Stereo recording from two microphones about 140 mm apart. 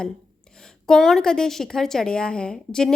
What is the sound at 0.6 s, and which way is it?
A woman's voice, 5° left (ahead or behind).